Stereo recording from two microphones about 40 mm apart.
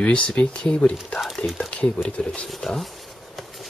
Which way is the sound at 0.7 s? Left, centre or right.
Left.